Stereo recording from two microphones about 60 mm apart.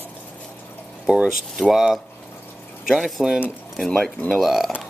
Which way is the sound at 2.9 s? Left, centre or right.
Centre.